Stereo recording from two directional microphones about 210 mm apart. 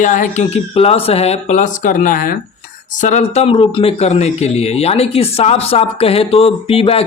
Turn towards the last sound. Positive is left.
turn(degrees=25)  # may be behind; listen again after turning